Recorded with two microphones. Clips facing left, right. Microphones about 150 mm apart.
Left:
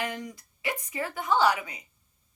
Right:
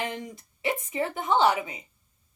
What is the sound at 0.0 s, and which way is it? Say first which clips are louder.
Speech: right 1 dB; 25° right (ahead or behind).